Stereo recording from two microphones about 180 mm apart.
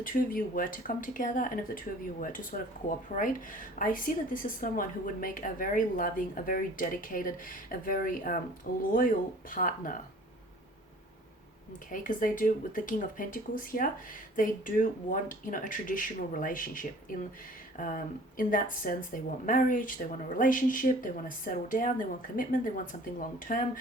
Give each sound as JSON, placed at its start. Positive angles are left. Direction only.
{"t": 0.0, "sound": "a woman's voice", "side_deg": 50}
{"t": 11.9, "sound": "a woman's voice", "side_deg": 50}